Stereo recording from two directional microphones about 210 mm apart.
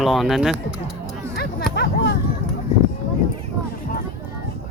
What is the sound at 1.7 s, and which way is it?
Speech, 50° left (ahead or behind).